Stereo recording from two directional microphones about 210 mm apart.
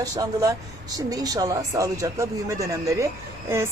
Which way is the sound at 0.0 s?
15° right (ahead or behind).